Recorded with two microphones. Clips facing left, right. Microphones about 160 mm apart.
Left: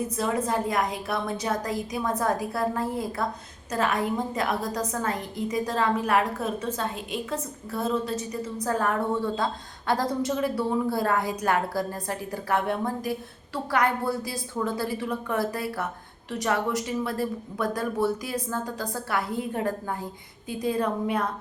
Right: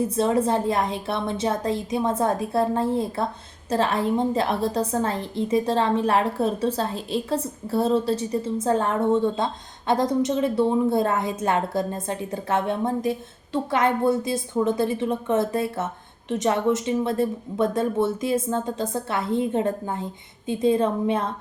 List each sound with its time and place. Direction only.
0.2 s a woman's voice: 30° right (ahead or behind)